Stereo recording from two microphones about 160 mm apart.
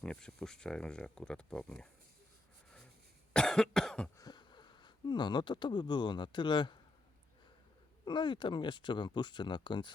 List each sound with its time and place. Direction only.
0.0 s speech: 5° left (ahead or behind)
3.3 s speech: 5° left (ahead or behind)
4.2 s speech: 25° left (ahead or behind)
8.0 s speech: 30° left (ahead or behind)